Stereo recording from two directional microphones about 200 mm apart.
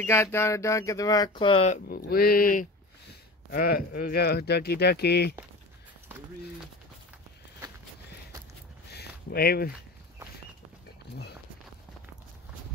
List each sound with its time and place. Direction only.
0.0 s speech: 15° left (ahead or behind); by 1.8 s 30° left (ahead or behind)
1.9 s speech: 50° left (ahead or behind)
8.9 s a sound: 50° left (ahead or behind)